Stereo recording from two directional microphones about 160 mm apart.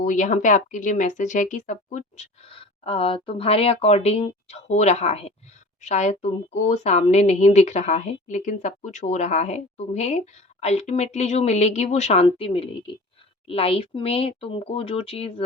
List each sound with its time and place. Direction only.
0.0 s a woman's voice: 55° left (ahead or behind); by 15.4 s 35° left (ahead or behind)